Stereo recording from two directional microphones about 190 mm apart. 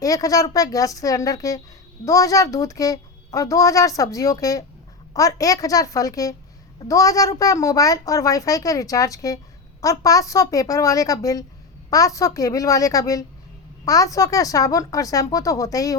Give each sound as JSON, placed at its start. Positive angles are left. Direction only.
{"t": 0.0, "sound": "a woman's voice", "side_deg": 20}